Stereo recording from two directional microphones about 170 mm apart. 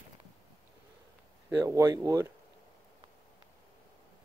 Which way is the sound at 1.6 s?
15° right (ahead or behind).